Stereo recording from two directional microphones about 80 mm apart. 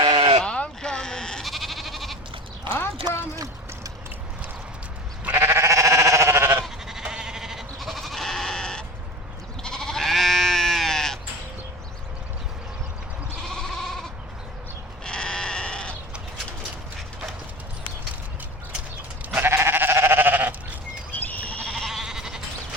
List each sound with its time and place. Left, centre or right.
0.0 s sheep: right
0.4 s sheep: centre
3.3 s a sound: right
5.4 s sheep: right
6.8 s goat: centre
13.4 s goat: centre
15.0 s sheep: centre
19.4 s sheep: right
21.1 s goat: left
21.6 s goat: centre